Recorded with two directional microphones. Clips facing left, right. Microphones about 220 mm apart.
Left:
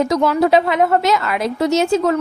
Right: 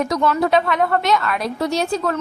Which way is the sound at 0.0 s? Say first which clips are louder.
Left 4 dB; 20° left (ahead or behind).